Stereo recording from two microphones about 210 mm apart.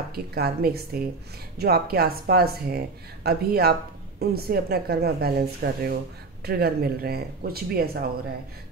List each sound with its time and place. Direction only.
0.1 s speech: 45° right (ahead or behind)